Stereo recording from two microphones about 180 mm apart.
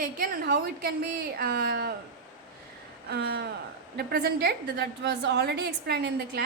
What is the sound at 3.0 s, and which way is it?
A woman's voice, 60° right (ahead or behind).